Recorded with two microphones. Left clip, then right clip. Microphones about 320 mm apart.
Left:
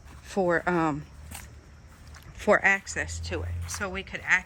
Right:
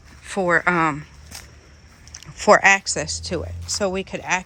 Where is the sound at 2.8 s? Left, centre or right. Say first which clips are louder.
Right 7 dB; centre.